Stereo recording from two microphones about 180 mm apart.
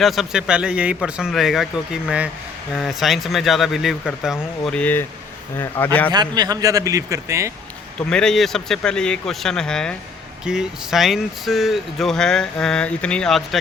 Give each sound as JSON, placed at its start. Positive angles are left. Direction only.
{"t": 0.0, "sound": "a man's voice", "side_deg": 0}
{"t": 6.1, "sound": "speech", "side_deg": -25}
{"t": 8.1, "sound": "speech", "side_deg": 5}